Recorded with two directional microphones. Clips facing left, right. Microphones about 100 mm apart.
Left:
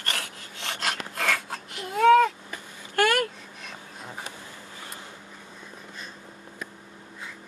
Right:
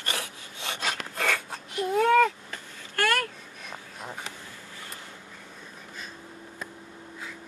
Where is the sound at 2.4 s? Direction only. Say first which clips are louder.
Left 1 dB; 15° left (ahead or behind).